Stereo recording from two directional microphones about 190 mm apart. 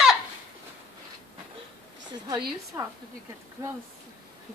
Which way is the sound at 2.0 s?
25° right (ahead or behind).